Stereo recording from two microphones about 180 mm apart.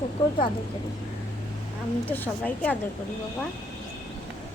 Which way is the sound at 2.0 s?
10° left (ahead or behind).